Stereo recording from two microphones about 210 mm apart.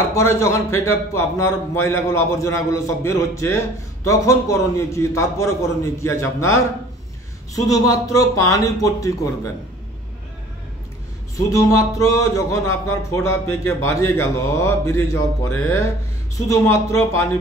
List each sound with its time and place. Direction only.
0.1 s a man's voice: 15° left (ahead or behind)
11.3 s a man's voice: 15° left (ahead or behind)